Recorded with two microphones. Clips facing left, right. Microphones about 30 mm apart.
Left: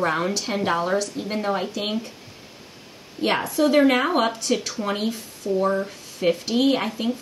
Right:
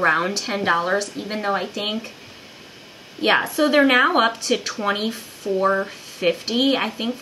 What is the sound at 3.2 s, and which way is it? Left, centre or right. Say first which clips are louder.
A woman's voice: right 3 dB; right.